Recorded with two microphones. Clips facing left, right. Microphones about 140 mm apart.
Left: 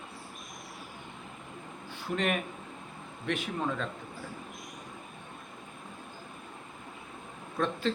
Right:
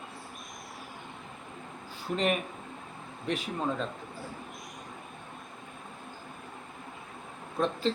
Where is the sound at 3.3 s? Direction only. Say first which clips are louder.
Right 1 dB; 35° right (ahead or behind).